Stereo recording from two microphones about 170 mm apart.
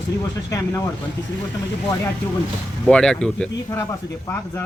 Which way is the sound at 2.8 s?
5° left (ahead or behind).